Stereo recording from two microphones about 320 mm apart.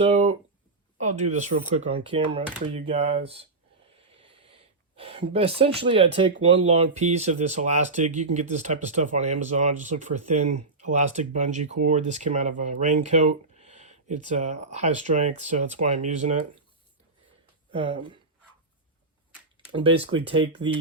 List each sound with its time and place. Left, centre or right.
0.0 s speech: centre
4.9 s speech: centre
17.7 s speech: centre
19.7 s speech: centre